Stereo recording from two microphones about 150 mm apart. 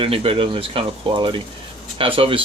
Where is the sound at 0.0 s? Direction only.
40° right (ahead or behind).